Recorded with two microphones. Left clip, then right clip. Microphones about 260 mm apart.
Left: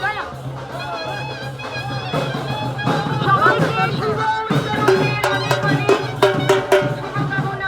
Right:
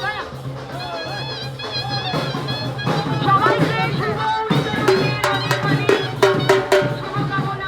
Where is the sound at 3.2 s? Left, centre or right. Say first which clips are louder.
Left 1 dB; right.